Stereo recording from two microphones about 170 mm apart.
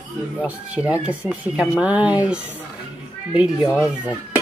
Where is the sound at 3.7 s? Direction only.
5° right (ahead or behind).